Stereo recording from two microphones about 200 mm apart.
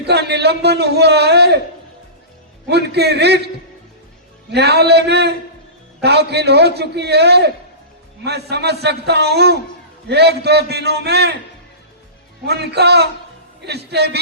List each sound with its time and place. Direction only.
0.0 s a man's voice: 55° right (ahead or behind)
2.6 s a man's voice: 55° right (ahead or behind)
4.5 s a man's voice: 55° right (ahead or behind)
12.5 s a man's voice: 55° right (ahead or behind)